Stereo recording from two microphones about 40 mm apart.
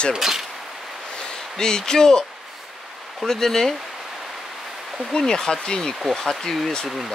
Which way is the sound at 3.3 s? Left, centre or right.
Centre.